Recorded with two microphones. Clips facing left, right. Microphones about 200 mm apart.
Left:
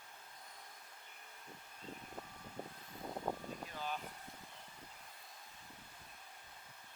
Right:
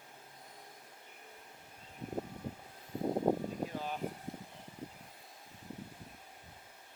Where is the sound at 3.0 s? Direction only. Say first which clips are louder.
Right 11 dB; 35° right (ahead or behind).